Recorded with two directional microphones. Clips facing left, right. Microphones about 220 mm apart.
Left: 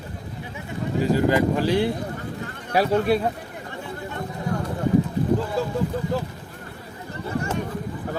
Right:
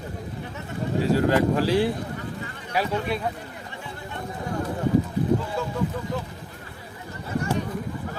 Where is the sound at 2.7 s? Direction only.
45° left (ahead or behind).